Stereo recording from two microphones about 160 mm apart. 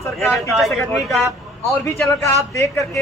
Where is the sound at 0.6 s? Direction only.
Centre (ahead or behind).